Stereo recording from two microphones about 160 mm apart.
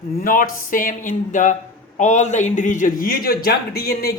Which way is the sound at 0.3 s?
60° left (ahead or behind).